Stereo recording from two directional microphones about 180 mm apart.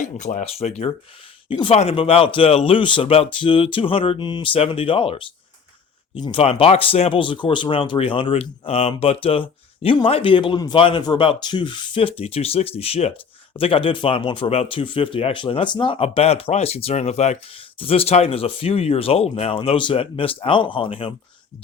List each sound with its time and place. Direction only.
0.0 s speech: 45° left (ahead or behind)